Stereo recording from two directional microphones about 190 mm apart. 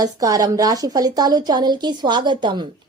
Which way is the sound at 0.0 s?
20° right (ahead or behind).